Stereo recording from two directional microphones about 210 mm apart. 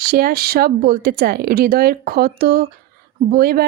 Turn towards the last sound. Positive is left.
turn(degrees=-45)  # may be behind; listen again after turning